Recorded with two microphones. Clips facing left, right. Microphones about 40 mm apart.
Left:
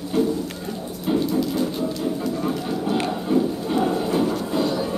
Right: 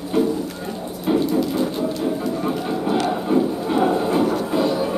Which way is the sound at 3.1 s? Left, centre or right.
Centre.